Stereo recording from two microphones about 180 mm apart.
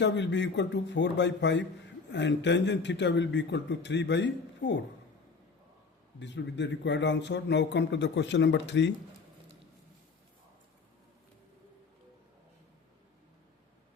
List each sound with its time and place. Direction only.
0.0 s a man's voice: 80° left
6.1 s a man's voice: 75° left (ahead or behind)